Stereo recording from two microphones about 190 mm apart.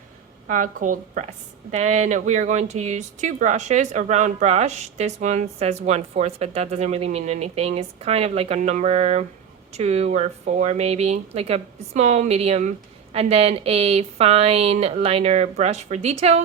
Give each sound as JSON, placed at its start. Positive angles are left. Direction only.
{"t": 0.4, "sound": "a woman's voice", "side_deg": -45}